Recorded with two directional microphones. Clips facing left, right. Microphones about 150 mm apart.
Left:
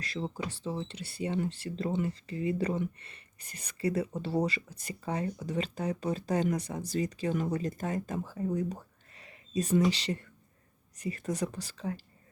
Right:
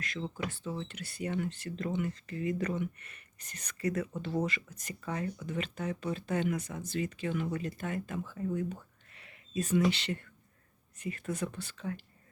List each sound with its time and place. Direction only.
0.0 s speech: 35° left (ahead or behind)